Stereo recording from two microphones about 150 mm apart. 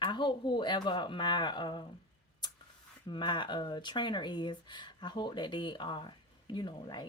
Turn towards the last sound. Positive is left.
turn(degrees=30)  # may be behind; listen again after turning